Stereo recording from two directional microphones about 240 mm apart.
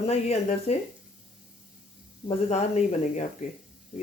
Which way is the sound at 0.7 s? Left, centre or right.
Left.